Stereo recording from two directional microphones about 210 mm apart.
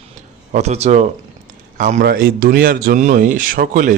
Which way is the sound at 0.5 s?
30° right (ahead or behind).